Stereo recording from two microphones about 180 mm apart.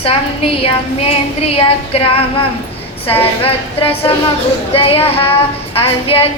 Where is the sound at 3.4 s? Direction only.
30° left (ahead or behind).